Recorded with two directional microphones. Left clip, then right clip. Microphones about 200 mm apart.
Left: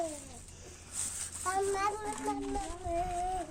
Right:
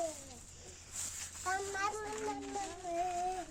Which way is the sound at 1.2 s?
60° left (ahead or behind).